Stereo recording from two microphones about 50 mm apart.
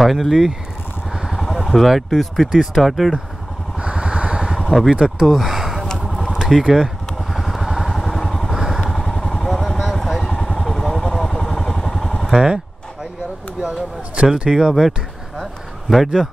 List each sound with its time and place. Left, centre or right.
0.0 s speech: centre
3.8 s vehicle: right
4.6 s speech: centre
5.2 s a sound: centre
6.7 s vehicle: centre
8.5 s motorcycle: centre
9.1 s vehicle: centre
12.3 s speech: centre
13.6 s a sound: centre
15.9 s speech: centre